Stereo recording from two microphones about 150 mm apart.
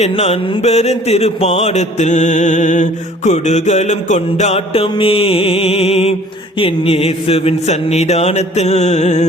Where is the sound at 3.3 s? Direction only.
50° left (ahead or behind).